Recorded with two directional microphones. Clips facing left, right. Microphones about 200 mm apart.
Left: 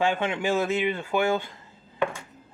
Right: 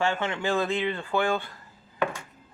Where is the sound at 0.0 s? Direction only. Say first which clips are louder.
Left 2 dB; 15° left (ahead or behind).